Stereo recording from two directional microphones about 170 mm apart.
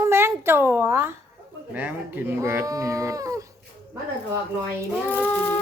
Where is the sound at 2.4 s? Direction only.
15° right (ahead or behind).